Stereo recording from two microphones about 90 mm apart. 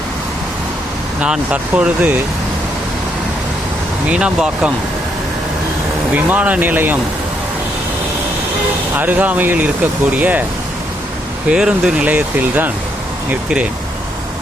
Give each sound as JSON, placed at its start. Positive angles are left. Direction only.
{"t": 1.2, "sound": "speech", "side_deg": -15}
{"t": 4.1, "sound": "speech", "side_deg": -10}
{"t": 6.1, "sound": "speech", "side_deg": -20}
{"t": 9.0, "sound": "speech", "side_deg": -20}
{"t": 11.4, "sound": "speech", "side_deg": -10}